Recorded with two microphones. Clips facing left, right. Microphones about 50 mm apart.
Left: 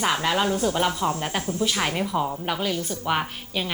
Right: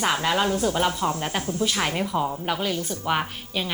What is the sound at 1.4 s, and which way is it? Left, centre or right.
Speech, left.